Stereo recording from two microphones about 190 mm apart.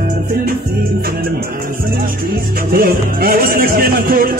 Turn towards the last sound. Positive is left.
turn(degrees=-50)  # may be behind; listen again after turning